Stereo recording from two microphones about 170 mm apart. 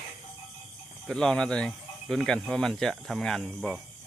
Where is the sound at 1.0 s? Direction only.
5° left (ahead or behind).